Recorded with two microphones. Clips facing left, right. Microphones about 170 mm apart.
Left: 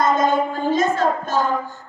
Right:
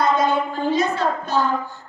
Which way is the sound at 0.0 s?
45° left (ahead or behind).